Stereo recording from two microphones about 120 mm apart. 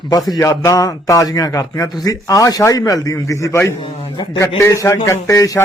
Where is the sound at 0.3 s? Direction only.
25° left (ahead or behind).